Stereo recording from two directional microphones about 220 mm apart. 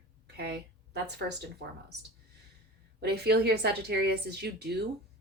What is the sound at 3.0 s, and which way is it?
A woman's voice, 45° right (ahead or behind).